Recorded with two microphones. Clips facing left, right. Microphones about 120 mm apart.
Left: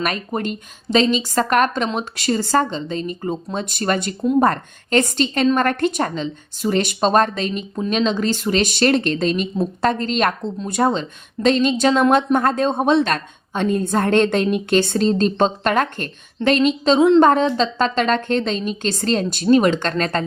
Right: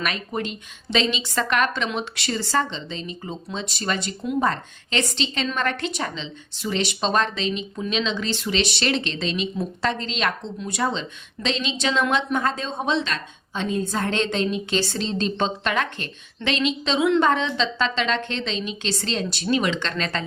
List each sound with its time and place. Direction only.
0.0 s a woman's voice: 45° left (ahead or behind)